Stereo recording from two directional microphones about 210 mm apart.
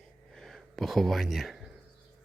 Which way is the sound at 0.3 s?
Centre (ahead or behind).